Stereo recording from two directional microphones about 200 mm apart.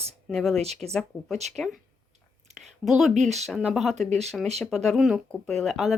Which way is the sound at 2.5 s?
35° right (ahead or behind).